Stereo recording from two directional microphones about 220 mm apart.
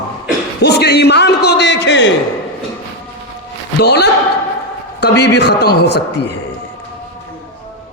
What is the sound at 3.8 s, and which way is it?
A man's voice, 50° left (ahead or behind).